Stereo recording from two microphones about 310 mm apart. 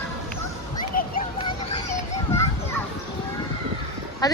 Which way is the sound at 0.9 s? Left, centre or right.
Left.